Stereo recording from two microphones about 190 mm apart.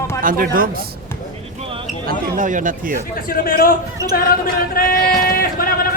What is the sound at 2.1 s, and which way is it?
Speech, 45° right (ahead or behind).